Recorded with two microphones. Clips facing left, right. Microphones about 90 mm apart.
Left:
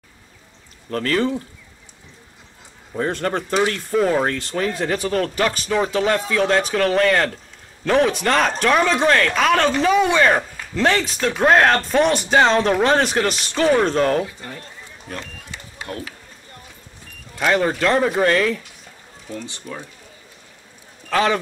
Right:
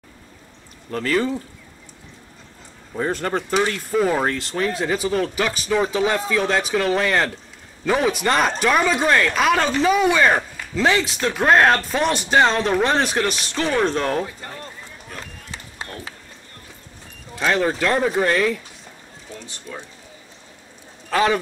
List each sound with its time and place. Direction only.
0.8 s speech: 10° right (ahead or behind)
3.0 s speech: 5° right (ahead or behind)
15.5 s run: 30° right (ahead or behind)
17.5 s speech: centre (ahead or behind)
19.7 s speech: 55° left (ahead or behind)
21.1 s speech: 5° right (ahead or behind)